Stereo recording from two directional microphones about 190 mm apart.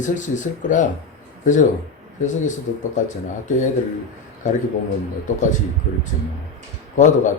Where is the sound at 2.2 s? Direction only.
40° left (ahead or behind).